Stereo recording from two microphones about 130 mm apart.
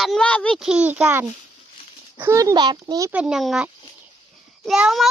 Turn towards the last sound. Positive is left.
turn(degrees=-5)  # may be behind; listen again after turning